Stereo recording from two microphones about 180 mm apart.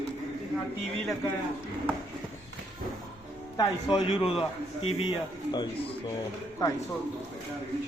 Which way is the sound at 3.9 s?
35° left (ahead or behind).